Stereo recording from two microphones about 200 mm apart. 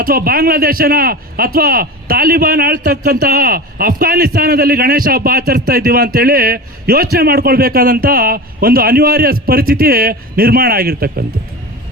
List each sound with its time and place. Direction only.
0.0 s a man's voice: 45° right (ahead or behind)